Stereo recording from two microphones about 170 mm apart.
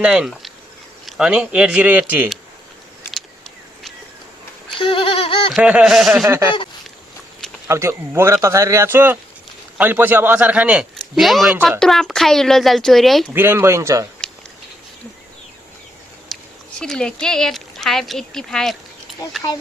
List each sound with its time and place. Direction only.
0.0 s speech: 5° right (ahead or behind)
4.8 s a sound: 30° left (ahead or behind)
5.5 s speech: 5° right (ahead or behind)
6.2 s speech: 15° right (ahead or behind)
7.7 s speech: 15° right (ahead or behind)
11.8 s speech: centre (ahead or behind)
13.3 s speech: 15° right (ahead or behind)
16.3 s speech: 5° left (ahead or behind)